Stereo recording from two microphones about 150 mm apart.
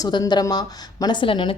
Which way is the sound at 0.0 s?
25° left (ahead or behind).